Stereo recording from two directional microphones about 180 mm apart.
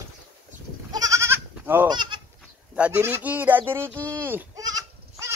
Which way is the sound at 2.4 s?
5° right (ahead or behind).